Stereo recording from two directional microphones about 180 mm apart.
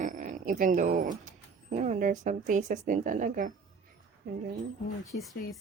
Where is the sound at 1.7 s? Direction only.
50° right (ahead or behind).